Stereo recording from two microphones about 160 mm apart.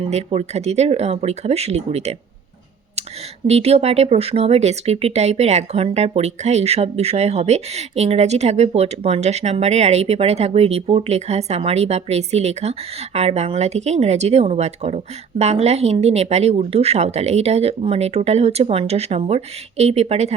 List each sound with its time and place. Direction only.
0.0 s speech: 40° right (ahead or behind)
3.4 s speech: 40° right (ahead or behind)